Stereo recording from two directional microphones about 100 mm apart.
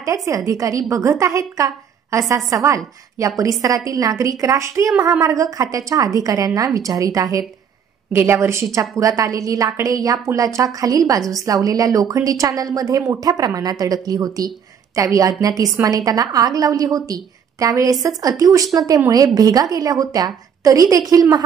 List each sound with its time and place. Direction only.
0.0 s a woman's voice: 30° right (ahead or behind)
8.1 s a woman's voice: 25° right (ahead or behind)